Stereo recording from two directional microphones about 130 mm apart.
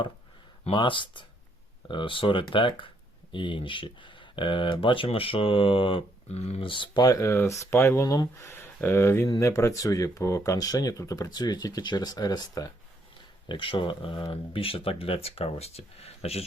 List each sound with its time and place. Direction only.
0.7 s speech: 40° left (ahead or behind)
13.5 s speech: 40° left (ahead or behind)